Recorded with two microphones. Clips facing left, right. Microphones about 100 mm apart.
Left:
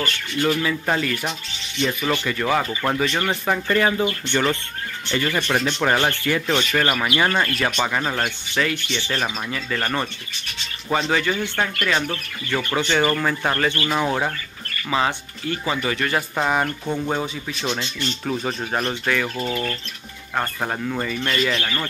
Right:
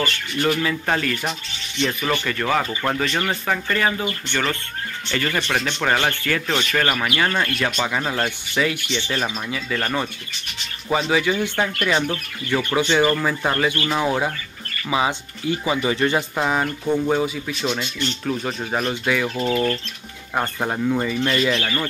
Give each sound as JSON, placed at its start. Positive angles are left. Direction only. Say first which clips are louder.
{"t": 0.4, "sound": "speech", "louder": "even", "side_deg": 5}
{"t": 3.4, "sound": "speech", "louder": "left 4 dB", "side_deg": 10}
{"t": 5.2, "sound": "speech", "louder": "left 1 dB", "side_deg": 5}
{"t": 6.5, "sound": "speech", "louder": "even", "side_deg": 5}
{"t": 7.1, "sound": "speech", "louder": "left 1 dB", "side_deg": 20}
{"t": 7.4, "sound": "speech", "louder": "left 1 dB", "side_deg": 0}
{"t": 16.3, "sound": "speech", "louder": "even", "side_deg": 0}
{"t": 17.9, "sound": "speech", "louder": "right 1 dB", "side_deg": 5}
{"t": 19.3, "sound": "speech", "louder": "right 4 dB", "side_deg": -20}
{"t": 20.3, "sound": "speech", "louder": "right 2 dB", "side_deg": -5}